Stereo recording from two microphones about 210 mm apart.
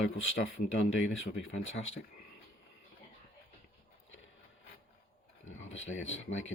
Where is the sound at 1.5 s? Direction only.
65° left (ahead or behind).